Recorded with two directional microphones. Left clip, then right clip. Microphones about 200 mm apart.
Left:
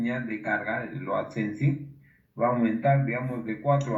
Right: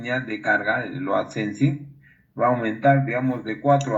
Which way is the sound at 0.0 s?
45° right (ahead or behind).